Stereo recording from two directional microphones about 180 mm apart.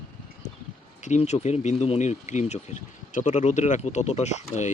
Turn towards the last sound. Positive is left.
turn(degrees=40)  # may be behind; listen again after turning